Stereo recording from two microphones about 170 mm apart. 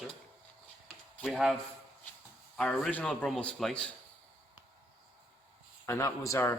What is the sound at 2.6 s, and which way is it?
A man's voice, 5° left (ahead or behind).